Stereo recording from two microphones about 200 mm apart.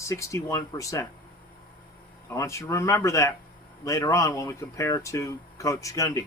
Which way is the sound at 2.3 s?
15° left (ahead or behind).